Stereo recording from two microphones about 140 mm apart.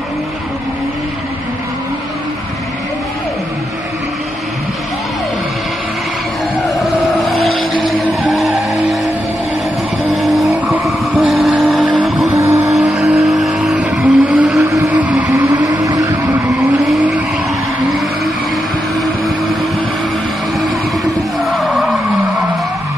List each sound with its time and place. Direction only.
7.8 s vehicle: centre (ahead or behind)
10.1 s vehicle: centre (ahead or behind)
12.4 s vehicle: 20° right (ahead or behind)
12.7 s vehicle: 5° right (ahead or behind)
15.5 s vehicle: 25° right (ahead or behind)
21.0 s a sound: centre (ahead or behind)